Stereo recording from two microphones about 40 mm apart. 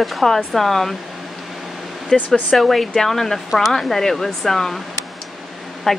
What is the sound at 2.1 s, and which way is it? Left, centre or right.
Speech, left.